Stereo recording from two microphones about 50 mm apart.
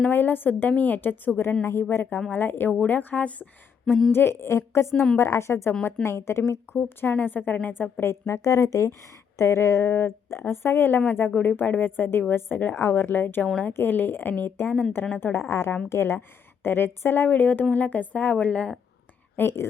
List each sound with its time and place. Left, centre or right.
0.1 s speech: left
1.6 s a woman's voice: left
2.3 s a woman's voice: left
4.1 s a woman's voice: left
4.4 s a woman's voice: left
6.7 s speech: left
8.1 s speech: left
9.4 s a woman's voice: left
12.7 s a woman's voice: left
13.1 s speech: left
15.2 s a woman's voice: left
19.4 s a woman's voice: left